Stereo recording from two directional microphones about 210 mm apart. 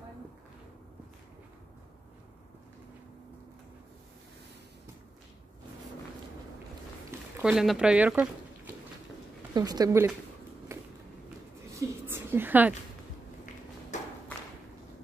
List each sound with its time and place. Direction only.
7.1 s speech: 10° right (ahead or behind)
9.5 s speech: 20° right (ahead or behind)
10.7 s a sound: 15° right (ahead or behind)